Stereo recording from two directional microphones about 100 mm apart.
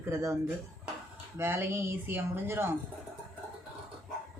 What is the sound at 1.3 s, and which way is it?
Speech, 20° right (ahead or behind).